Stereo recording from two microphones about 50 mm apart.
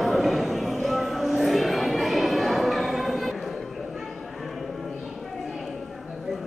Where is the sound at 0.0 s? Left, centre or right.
Centre.